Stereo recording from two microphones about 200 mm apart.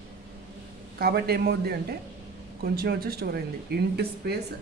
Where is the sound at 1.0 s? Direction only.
50° right (ahead or behind).